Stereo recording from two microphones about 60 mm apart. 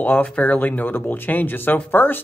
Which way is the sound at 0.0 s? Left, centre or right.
Left.